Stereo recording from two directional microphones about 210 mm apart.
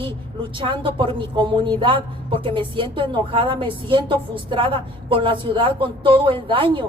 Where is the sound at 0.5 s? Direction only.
25° right (ahead or behind).